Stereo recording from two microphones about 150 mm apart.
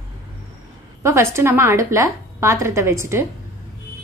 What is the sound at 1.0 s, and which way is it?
A woman's voice, 20° right (ahead or behind).